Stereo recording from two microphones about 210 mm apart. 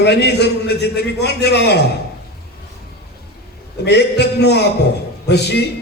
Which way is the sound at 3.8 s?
50° left (ahead or behind).